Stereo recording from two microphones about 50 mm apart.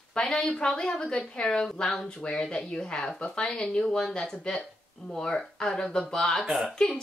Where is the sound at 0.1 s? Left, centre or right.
Centre.